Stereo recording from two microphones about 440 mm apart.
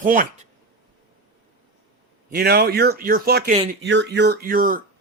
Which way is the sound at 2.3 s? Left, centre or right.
Right.